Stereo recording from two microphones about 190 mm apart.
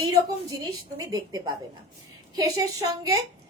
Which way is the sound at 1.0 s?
20° right (ahead or behind).